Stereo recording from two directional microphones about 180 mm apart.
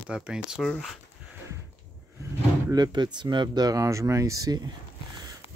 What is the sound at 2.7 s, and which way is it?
Speech, 25° right (ahead or behind).